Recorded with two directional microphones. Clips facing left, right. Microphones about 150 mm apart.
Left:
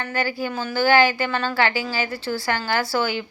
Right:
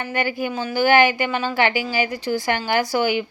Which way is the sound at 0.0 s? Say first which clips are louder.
Right 2 dB; 20° right (ahead or behind).